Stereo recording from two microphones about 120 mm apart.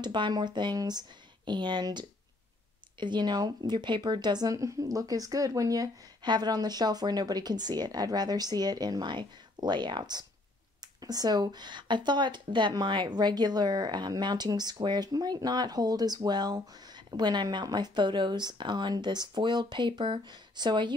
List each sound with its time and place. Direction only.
0.0 s a woman's voice: 40° right (ahead or behind)